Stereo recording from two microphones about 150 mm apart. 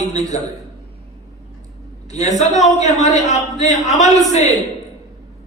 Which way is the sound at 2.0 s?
50° left (ahead or behind).